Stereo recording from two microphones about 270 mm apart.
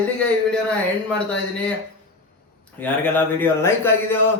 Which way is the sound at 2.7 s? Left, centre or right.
Centre.